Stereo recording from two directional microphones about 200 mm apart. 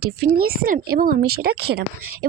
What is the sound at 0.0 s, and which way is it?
Speech, 50° right (ahead or behind).